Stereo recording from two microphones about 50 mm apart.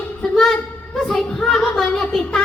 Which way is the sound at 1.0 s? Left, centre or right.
Centre.